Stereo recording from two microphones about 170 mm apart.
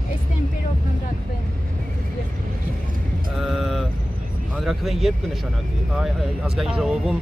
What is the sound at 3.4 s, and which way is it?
Vehicle, centre (ahead or behind).